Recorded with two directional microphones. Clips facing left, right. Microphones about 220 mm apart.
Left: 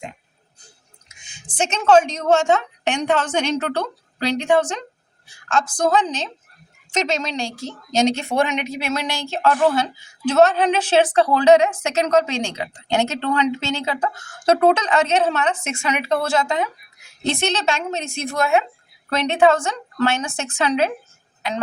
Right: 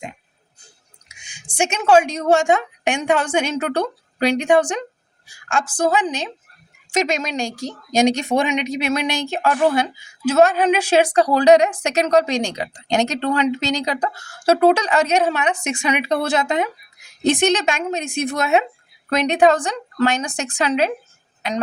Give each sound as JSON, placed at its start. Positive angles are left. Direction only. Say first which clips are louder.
{"t": 1.0, "sound": "speech", "louder": "left 1 dB", "side_deg": -10}
{"t": 13.8, "sound": "speech", "louder": "right 1 dB", "side_deg": -35}
{"t": 14.7, "sound": "speech", "louder": "right 1 dB", "side_deg": -10}